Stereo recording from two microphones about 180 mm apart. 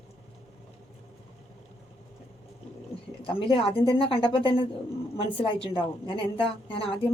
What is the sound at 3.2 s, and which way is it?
A woman's voice, 30° left (ahead or behind).